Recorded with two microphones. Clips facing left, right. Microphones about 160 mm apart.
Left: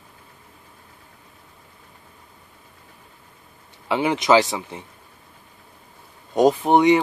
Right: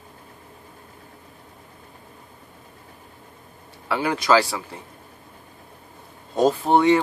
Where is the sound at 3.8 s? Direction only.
20° left (ahead or behind).